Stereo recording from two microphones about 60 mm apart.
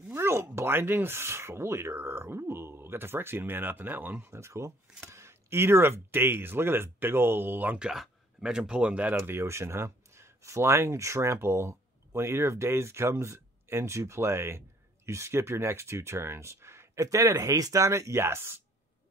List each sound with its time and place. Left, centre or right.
0.1 s a sound: right
0.6 s speech: right
7.8 s speech: centre
9.2 s speech: right
11.3 s speech: right
17.0 s speech: right